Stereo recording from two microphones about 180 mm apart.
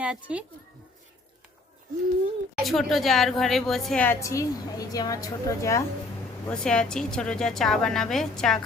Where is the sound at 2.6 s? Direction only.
Centre (ahead or behind); by 5.8 s 15° left (ahead or behind).